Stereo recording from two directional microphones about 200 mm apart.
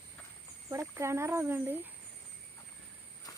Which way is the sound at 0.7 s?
15° right (ahead or behind).